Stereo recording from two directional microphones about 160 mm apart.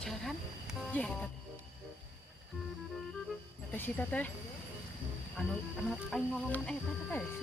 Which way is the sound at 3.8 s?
10° left (ahead or behind).